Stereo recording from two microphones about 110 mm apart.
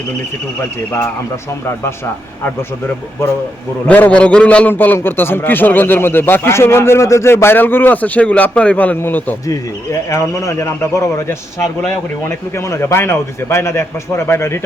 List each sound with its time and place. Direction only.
3.8 s a man's voice: 15° left (ahead or behind)
9.5 s a man's voice: 30° left (ahead or behind)